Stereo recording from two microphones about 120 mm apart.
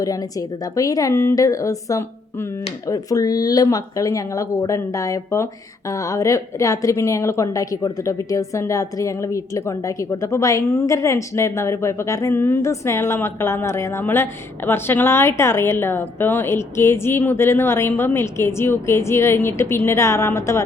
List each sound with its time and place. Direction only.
0.0 s a woman's voice: 30° left (ahead or behind)